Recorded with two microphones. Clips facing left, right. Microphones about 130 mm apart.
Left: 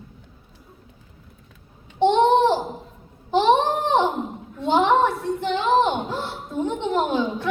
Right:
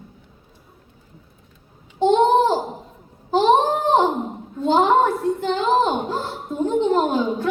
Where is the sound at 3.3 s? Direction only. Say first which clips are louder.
Right 2 dB; 40° right (ahead or behind).